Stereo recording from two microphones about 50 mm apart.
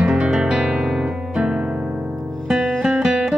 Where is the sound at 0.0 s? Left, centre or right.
Centre.